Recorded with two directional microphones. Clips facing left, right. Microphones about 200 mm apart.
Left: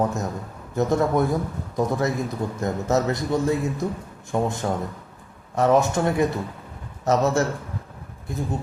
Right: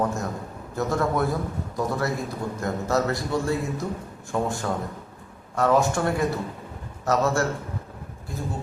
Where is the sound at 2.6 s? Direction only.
20° left (ahead or behind).